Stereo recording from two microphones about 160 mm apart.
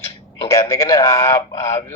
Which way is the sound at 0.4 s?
15° left (ahead or behind).